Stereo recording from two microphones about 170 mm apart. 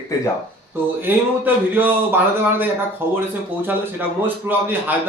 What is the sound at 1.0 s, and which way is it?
A man's voice, 10° right (ahead or behind).